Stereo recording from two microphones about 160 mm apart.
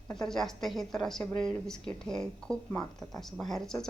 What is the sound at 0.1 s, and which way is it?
A woman's voice, 5° left (ahead or behind).